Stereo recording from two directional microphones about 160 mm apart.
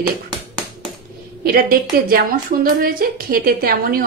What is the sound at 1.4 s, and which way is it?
A woman's voice, 65° right (ahead or behind).